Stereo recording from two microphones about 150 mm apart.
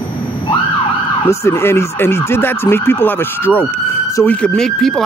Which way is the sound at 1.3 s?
15° left (ahead or behind).